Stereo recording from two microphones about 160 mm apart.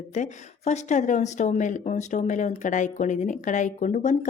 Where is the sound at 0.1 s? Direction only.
45° left (ahead or behind).